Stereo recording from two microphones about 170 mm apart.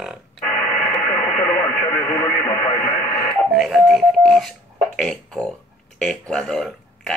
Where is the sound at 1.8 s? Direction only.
15° left (ahead or behind).